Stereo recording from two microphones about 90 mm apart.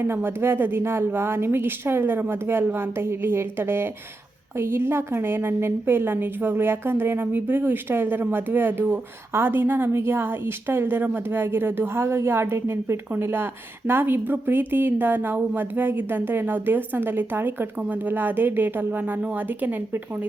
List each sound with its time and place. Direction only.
0.0 s a woman's voice: 25° right (ahead or behind)